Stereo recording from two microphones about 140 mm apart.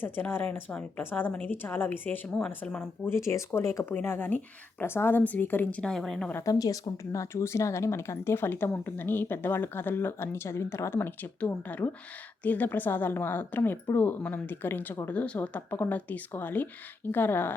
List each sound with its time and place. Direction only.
0.0 s speech: 15° left (ahead or behind)
3.1 s speech: 20° left (ahead or behind)
6.4 s speech: 25° left (ahead or behind)